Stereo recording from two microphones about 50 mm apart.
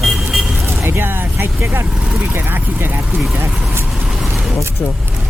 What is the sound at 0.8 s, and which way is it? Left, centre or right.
Speech, right.